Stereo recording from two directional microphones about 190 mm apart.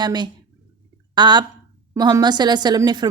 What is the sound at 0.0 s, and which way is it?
Speech, 20° right (ahead or behind).